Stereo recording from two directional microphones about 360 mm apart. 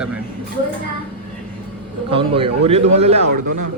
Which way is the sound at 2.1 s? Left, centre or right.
Centre.